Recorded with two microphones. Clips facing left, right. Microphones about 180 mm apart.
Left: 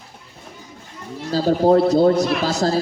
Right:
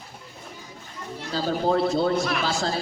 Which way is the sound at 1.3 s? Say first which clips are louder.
Left 8 dB; 40° left (ahead or behind).